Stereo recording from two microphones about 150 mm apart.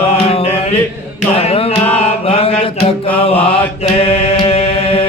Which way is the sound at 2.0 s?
40° left (ahead or behind).